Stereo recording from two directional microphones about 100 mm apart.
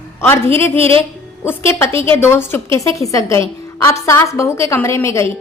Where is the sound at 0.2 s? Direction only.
25° left (ahead or behind).